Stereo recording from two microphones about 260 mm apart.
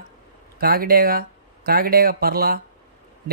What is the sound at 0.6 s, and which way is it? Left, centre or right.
Speech, right.